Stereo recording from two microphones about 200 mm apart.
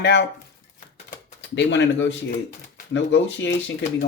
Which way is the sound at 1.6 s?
60° left (ahead or behind).